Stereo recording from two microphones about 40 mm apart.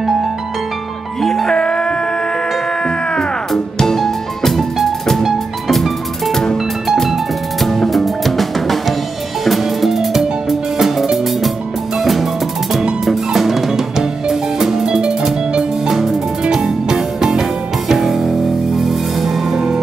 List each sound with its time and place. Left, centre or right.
0.0 s music: centre
1.2 s music: centre
1.5 s music: centre
3.5 s music: centre
7.6 s music: centre